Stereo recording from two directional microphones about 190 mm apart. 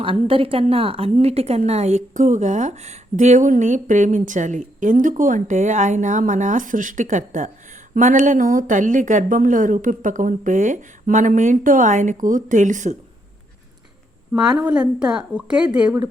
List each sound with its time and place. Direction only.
0.0 s a woman's voice: 30° right (ahead or behind)
14.3 s a woman's voice: 5° right (ahead or behind)